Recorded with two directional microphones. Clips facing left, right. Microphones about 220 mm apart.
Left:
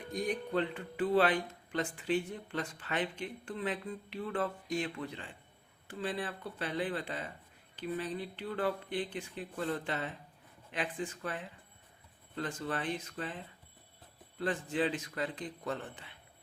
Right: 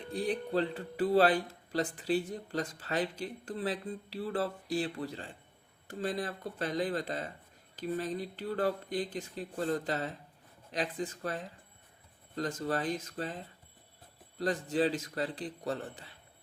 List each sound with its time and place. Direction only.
0.1 s speech: 30° right (ahead or behind)